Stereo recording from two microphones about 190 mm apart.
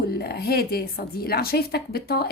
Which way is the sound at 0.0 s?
55° left (ahead or behind).